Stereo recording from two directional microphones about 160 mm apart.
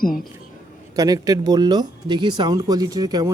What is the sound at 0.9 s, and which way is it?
Speech, 20° right (ahead or behind).